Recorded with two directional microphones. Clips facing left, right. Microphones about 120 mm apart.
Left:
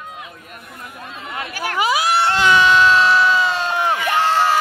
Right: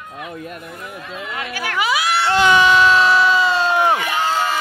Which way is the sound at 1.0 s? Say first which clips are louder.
Even; 30° left (ahead or behind).